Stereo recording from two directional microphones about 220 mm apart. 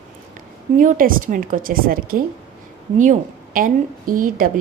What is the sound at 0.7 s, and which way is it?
A woman's voice, 35° right (ahead or behind).